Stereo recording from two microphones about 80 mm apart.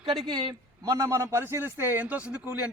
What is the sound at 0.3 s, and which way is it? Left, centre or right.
Speech, right.